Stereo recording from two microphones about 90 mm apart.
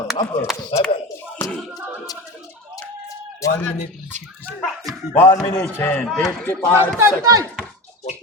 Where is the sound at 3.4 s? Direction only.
35° left (ahead or behind).